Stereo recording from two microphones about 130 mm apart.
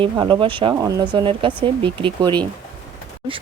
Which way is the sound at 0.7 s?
30° right (ahead or behind).